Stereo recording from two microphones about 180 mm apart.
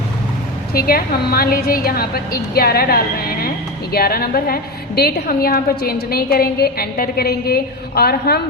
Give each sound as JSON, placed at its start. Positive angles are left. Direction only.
{"t": 0.7, "sound": "a woman's voice", "side_deg": 55}